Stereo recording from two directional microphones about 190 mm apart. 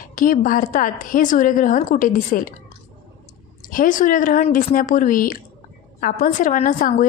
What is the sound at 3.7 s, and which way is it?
A woman's voice, 45° left (ahead or behind).